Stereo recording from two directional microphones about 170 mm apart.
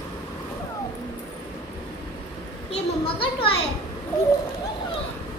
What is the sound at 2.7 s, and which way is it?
Children playing, 30° left (ahead or behind).